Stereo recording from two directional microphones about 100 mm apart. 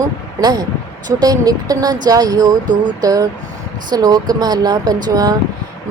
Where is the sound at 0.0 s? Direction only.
40° right (ahead or behind).